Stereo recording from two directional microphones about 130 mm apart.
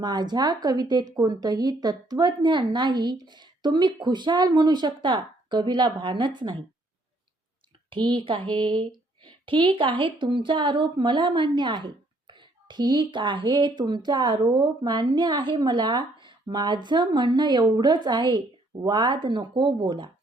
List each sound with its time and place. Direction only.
0.0 s a woman's voice: 35° right (ahead or behind)
7.9 s a woman's voice: 40° right (ahead or behind)